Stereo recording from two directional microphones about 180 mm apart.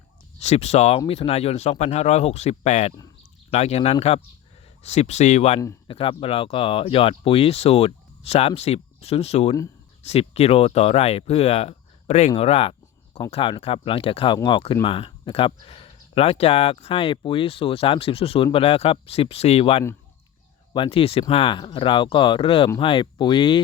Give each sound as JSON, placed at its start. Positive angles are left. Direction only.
{"t": 0.3, "sound": "speech", "side_deg": 35}